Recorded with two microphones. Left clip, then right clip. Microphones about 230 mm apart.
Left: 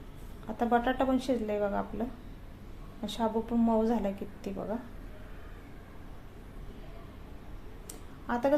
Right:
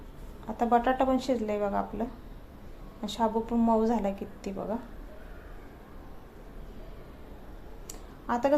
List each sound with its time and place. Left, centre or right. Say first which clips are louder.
0.4 s a woman's voice: right 3 dB; centre
8.3 s a woman's voice: right 2 dB; centre